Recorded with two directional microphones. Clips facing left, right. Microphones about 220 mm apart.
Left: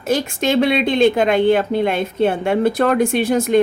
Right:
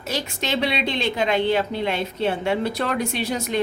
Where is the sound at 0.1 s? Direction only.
50° left (ahead or behind).